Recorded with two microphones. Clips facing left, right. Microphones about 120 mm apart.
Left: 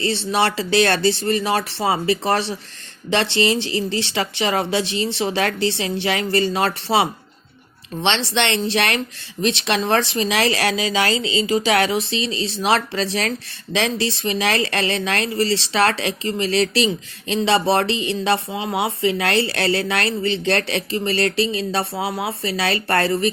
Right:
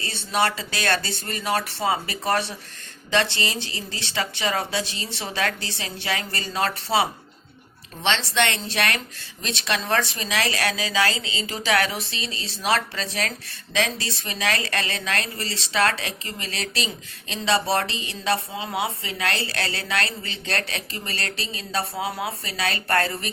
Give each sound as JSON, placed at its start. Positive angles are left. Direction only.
{"t": 0.0, "sound": "speech", "side_deg": 25}
{"t": 8.4, "sound": "speech", "side_deg": 25}